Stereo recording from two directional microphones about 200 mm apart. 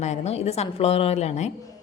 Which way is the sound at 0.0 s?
35° left (ahead or behind).